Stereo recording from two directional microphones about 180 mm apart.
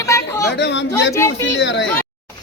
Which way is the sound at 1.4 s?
90° left.